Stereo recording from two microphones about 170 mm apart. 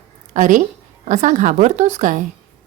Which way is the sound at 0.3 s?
50° right (ahead or behind).